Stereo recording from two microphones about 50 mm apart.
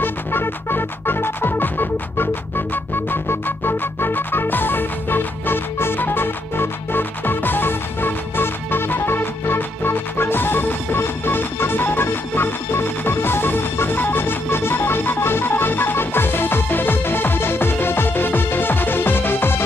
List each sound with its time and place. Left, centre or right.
0.0 s music: left